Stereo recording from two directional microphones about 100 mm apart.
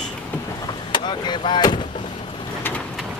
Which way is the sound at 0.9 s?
50° left (ahead or behind).